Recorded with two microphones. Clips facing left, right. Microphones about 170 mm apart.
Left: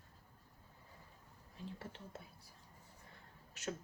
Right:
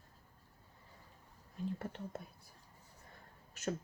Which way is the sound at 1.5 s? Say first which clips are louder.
Right 8 dB; 50° right (ahead or behind).